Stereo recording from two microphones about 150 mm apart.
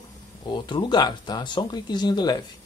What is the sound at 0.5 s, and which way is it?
Speech, 30° left (ahead or behind).